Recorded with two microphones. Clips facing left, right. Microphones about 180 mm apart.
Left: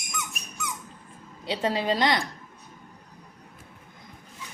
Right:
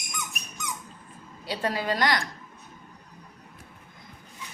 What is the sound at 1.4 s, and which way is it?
Speech, 20° left (ahead or behind).